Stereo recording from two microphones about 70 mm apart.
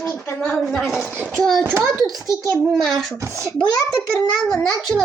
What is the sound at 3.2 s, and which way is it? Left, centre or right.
Speech, right.